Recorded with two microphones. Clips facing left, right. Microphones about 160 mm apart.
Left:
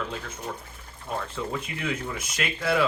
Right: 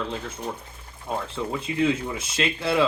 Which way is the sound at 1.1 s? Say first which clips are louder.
Right 2 dB; 20° right (ahead or behind).